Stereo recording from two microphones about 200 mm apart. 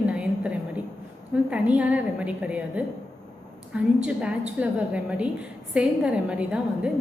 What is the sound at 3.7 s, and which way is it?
A woman's voice, 5° right (ahead or behind).